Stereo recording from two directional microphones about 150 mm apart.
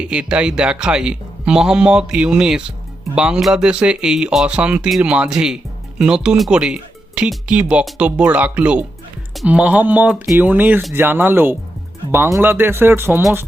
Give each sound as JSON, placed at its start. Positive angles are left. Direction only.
{"t": 0.0, "sound": "speech", "side_deg": -5}